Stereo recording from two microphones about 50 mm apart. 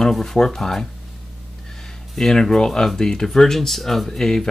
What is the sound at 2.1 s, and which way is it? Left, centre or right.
Speech, centre.